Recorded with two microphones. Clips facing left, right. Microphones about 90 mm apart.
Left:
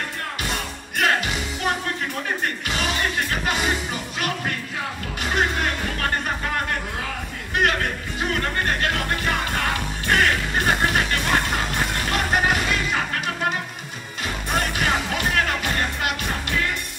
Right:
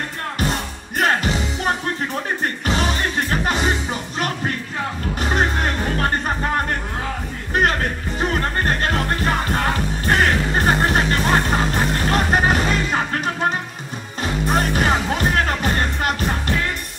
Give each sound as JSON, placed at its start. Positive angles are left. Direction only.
{"t": 0.4, "sound": "music", "side_deg": -35}
{"t": 5.2, "sound": "music", "side_deg": -35}